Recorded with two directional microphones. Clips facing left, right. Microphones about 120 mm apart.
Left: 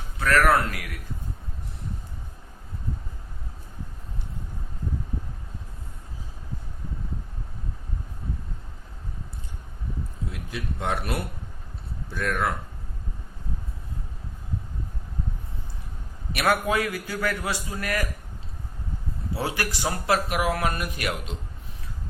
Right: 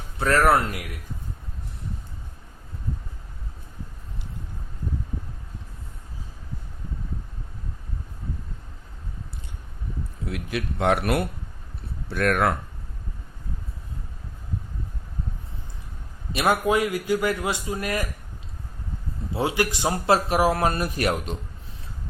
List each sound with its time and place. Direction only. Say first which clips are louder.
0.2 s speech: right 1 dB; 25° right (ahead or behind)
10.2 s speech: right 6 dB; 70° right (ahead or behind)
16.3 s speech: right 2 dB; 20° right (ahead or behind)
19.3 s speech: right 5 dB; 20° right (ahead or behind); by 21.3 s 40° right (ahead or behind)